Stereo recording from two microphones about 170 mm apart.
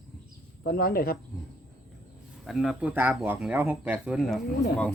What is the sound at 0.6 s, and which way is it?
Speech, 65° left (ahead or behind).